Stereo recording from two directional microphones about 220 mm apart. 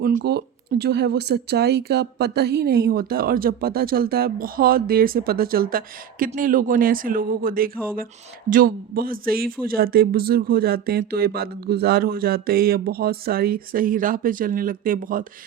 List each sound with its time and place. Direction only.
0.0 s speech: 40° right (ahead or behind)